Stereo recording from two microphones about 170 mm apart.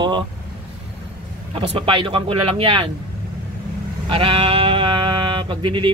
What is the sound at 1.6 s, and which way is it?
Speech, 30° right (ahead or behind).